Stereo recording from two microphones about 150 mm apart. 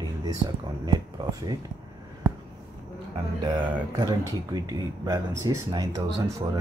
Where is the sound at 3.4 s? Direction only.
30° right (ahead or behind).